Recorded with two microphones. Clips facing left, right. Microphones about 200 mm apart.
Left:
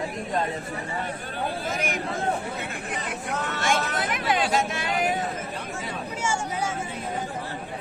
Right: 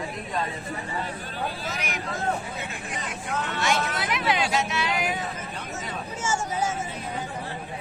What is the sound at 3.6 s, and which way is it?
Speech, 50° left (ahead or behind).